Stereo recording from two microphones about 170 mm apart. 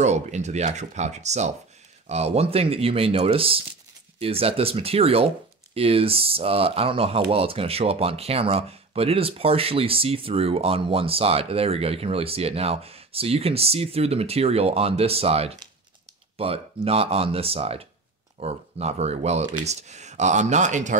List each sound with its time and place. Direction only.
0.0 s speech: 40° right (ahead or behind)